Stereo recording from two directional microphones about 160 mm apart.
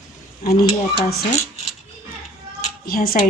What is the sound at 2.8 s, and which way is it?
Speech, 65° left (ahead or behind).